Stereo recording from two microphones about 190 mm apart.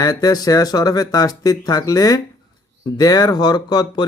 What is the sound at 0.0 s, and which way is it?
Speech, 20° left (ahead or behind).